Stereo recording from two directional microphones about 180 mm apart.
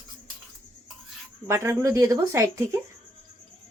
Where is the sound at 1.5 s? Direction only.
15° right (ahead or behind).